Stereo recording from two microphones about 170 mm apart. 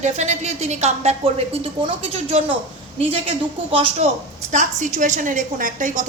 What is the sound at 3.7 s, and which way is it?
A woman's voice, 35° right (ahead or behind).